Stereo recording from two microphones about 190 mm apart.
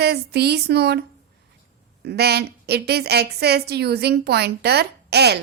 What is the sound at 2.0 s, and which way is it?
A woman's voice, 60° right (ahead or behind).